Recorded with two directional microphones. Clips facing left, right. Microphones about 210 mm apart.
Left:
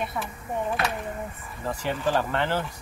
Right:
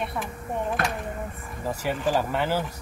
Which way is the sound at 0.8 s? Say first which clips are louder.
Even; 50° right (ahead or behind).